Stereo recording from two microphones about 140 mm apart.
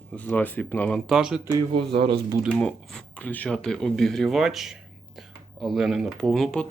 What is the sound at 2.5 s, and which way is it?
Speech, 5° left (ahead or behind).